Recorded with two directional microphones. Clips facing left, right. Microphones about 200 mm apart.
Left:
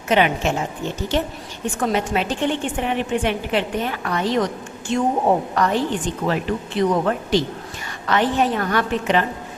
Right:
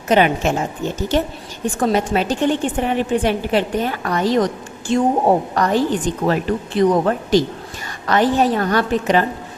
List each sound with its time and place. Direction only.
0.1 s a woman's voice: 40° right (ahead or behind)